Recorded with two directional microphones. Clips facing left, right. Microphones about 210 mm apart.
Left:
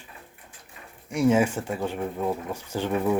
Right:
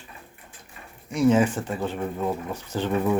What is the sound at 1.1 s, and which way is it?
Speech, 10° left (ahead or behind).